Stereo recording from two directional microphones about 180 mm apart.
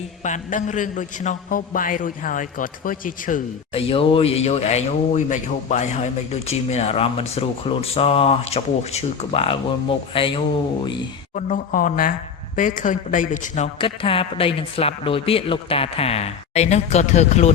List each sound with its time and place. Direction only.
0.2 s a man's voice: 45° left (ahead or behind)
3.7 s speech: 30° left (ahead or behind)
11.3 s a man's voice: 45° left (ahead or behind)
13.7 s speech: 30° left (ahead or behind)